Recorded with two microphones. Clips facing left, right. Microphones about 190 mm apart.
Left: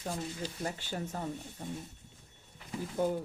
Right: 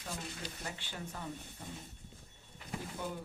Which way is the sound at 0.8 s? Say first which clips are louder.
Left 7 dB; 40° left (ahead or behind).